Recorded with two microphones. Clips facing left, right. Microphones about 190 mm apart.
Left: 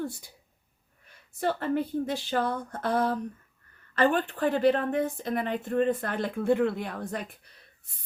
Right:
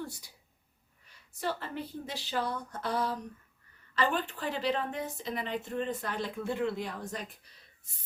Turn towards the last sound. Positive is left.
turn(degrees=60)  # may be behind; listen again after turning